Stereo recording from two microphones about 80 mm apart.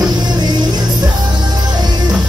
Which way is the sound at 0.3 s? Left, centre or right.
Right.